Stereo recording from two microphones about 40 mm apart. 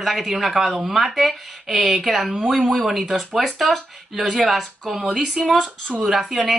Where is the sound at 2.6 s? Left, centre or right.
Centre.